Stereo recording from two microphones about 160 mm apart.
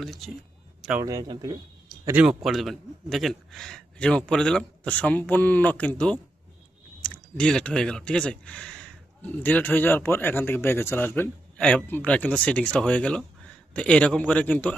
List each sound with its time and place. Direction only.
0.0 s a man's voice: centre (ahead or behind)
1.0 s speech: 25° right (ahead or behind)
2.0 s a man's voice: 10° right (ahead or behind); by 14.8 s 10° left (ahead or behind)